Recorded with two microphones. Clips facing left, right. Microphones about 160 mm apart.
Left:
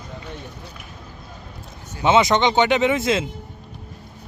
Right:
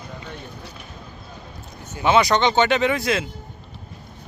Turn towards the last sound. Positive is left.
turn(degrees=20)  # may be behind; listen again after turning